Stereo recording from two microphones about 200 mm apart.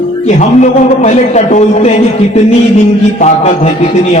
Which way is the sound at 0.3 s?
35° left (ahead or behind).